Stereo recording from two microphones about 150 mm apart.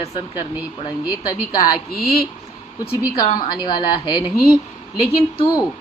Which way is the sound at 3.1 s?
30° left (ahead or behind).